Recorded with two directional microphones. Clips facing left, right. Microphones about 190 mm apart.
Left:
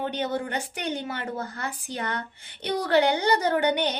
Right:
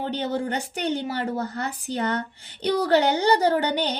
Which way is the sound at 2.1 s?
35° right (ahead or behind).